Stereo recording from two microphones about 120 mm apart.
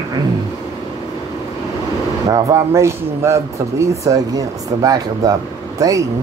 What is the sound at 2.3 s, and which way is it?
A man's voice, 25° right (ahead or behind).